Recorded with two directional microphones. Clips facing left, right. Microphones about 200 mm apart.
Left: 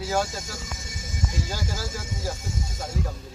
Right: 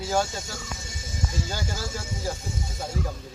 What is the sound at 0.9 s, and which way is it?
Music, 30° right (ahead or behind).